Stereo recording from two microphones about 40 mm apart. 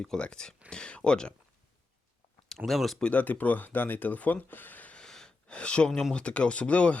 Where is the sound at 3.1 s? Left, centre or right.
Left.